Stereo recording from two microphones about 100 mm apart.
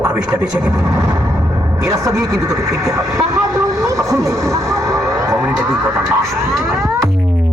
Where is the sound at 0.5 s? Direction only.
35° right (ahead or behind).